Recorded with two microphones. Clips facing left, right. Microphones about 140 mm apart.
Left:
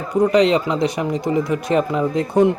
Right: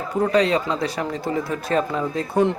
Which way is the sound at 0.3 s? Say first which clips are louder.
Left 3 dB; 20° left (ahead or behind).